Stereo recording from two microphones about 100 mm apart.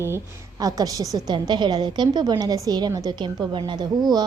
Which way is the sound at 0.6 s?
40° right (ahead or behind).